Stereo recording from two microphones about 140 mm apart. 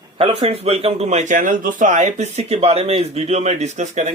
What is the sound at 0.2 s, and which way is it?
A man's voice, 45° right (ahead or behind).